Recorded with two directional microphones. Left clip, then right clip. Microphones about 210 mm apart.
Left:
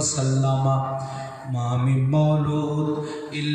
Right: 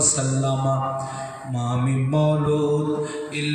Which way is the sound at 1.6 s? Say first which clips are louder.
Right 1 dB; 30° right (ahead or behind).